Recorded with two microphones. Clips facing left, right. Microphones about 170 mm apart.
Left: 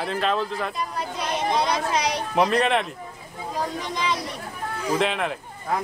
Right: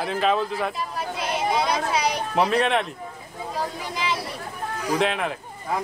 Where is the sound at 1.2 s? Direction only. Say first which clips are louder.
Even; 5° right (ahead or behind).